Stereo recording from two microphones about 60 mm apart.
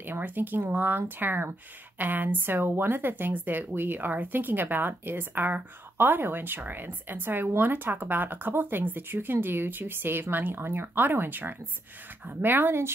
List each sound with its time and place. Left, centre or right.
0.0 s speech: right